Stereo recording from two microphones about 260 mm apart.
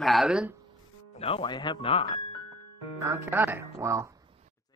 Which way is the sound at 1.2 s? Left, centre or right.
Left.